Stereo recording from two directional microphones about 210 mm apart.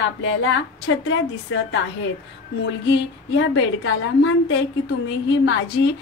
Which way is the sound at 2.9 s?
60° left (ahead or behind).